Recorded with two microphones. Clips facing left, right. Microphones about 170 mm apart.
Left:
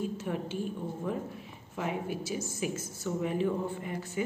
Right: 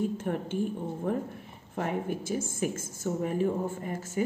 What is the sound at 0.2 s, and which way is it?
A woman's voice, 50° right (ahead or behind).